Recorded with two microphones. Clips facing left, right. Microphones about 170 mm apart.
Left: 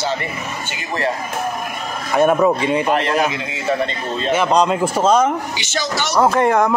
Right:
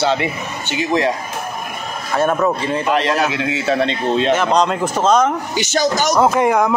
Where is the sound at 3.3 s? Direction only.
75° right (ahead or behind).